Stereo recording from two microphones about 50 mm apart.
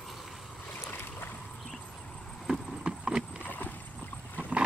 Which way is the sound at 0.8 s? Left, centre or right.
Left.